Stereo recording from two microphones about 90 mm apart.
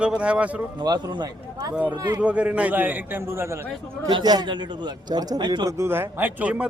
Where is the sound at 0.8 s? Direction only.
50° right (ahead or behind).